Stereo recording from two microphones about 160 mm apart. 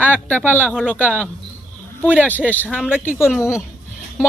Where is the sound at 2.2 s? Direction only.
10° left (ahead or behind).